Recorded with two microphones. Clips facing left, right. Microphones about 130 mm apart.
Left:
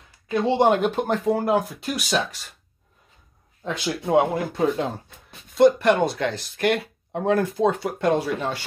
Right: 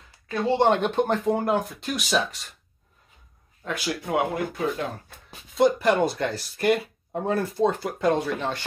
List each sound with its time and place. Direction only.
0.3 s speech: 15° left (ahead or behind)
3.6 s speech: 25° left (ahead or behind)
5.5 s speech: centre (ahead or behind)